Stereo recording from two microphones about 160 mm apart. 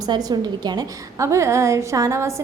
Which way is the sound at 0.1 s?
25° right (ahead or behind).